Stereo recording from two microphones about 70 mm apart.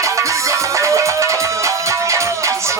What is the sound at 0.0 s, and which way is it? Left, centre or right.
Music, right.